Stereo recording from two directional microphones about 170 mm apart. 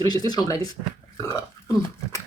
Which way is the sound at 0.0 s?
25° left (ahead or behind).